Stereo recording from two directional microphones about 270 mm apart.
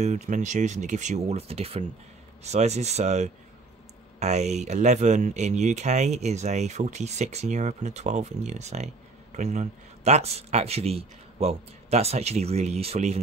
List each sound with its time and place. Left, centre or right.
0.0 s speech: right